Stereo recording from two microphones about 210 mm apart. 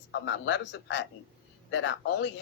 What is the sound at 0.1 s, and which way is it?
Speech, 60° left (ahead or behind).